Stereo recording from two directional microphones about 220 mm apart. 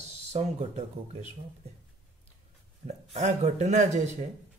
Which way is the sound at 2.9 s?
30° right (ahead or behind).